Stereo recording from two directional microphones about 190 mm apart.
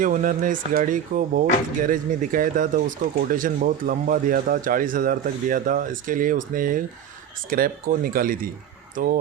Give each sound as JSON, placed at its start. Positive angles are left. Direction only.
{"t": 0.0, "sound": "speech", "side_deg": -45}